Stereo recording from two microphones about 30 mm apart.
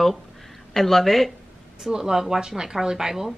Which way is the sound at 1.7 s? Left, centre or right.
Right.